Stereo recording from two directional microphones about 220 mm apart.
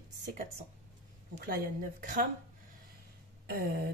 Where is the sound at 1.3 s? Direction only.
40° right (ahead or behind).